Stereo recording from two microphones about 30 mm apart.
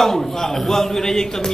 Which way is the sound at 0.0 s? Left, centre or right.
Centre.